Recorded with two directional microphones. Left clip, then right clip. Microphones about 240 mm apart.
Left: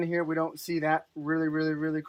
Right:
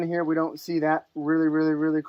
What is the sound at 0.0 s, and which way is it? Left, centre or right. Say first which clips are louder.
Speech: right 3 dB; right.